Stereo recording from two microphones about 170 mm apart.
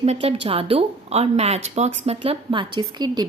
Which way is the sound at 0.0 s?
35° right (ahead or behind).